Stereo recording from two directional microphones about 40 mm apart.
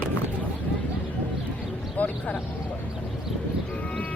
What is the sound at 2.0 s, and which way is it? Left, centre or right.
Speech, left.